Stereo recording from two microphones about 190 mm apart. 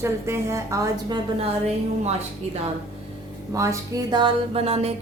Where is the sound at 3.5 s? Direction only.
15° right (ahead or behind).